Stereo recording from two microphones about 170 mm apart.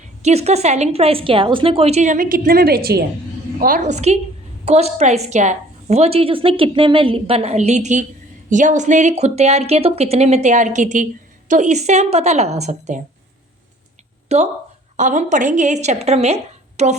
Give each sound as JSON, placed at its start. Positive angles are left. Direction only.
{"t": 0.2, "sound": "speech", "side_deg": -40}
{"t": 3.6, "sound": "a woman's voice", "side_deg": -50}
{"t": 14.3, "sound": "a woman's voice", "side_deg": -40}